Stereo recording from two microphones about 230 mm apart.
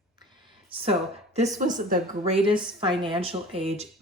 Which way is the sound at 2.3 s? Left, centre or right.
Right.